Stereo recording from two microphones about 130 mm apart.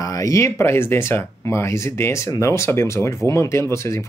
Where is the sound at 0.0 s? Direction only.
25° left (ahead or behind).